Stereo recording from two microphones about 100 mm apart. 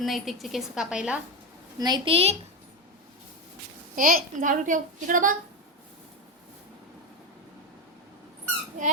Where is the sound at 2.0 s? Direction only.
75° right (ahead or behind).